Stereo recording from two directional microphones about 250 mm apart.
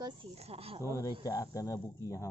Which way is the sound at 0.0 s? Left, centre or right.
Right.